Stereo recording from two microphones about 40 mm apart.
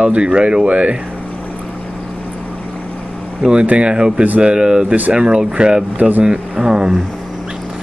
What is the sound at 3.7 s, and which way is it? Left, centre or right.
Speech, right.